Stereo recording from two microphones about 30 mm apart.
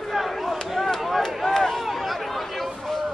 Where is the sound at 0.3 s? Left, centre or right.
Centre.